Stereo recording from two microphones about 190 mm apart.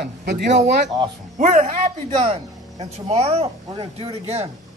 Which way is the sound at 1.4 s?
40° right (ahead or behind).